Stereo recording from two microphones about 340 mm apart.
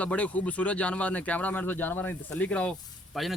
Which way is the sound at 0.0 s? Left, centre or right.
Centre.